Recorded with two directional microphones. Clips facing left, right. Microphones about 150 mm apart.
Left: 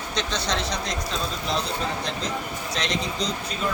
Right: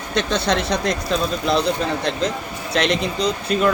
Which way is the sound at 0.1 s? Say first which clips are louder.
Right 8 dB; 55° right (ahead or behind).